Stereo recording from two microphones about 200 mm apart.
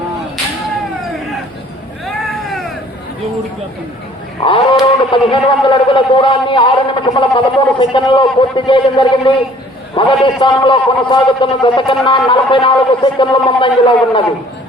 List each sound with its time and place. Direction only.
4.4 s a man's voice: 25° left (ahead or behind)